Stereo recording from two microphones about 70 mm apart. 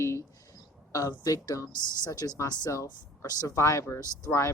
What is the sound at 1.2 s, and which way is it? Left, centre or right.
Speech, left.